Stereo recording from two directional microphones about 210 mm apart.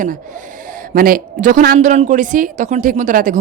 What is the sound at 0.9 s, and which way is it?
A woman's voice, 45° right (ahead or behind).